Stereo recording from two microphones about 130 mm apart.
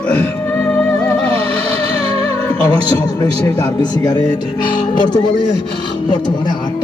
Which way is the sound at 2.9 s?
30° left (ahead or behind).